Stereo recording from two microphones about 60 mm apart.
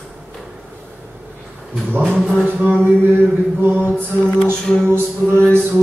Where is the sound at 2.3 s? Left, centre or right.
Right.